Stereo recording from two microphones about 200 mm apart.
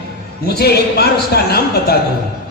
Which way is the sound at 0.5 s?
55° left (ahead or behind).